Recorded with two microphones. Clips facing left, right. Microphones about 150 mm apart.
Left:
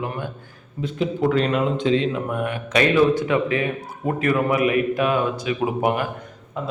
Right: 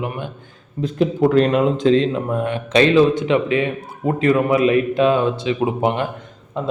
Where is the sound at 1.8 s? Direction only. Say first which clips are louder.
Right 5 dB; 35° right (ahead or behind).